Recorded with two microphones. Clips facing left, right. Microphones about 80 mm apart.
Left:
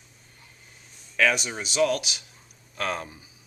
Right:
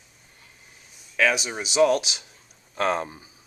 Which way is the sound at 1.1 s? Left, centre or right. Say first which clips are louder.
Right 1 dB; centre.